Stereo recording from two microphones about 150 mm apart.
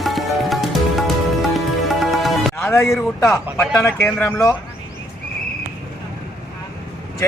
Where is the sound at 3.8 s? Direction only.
15° left (ahead or behind).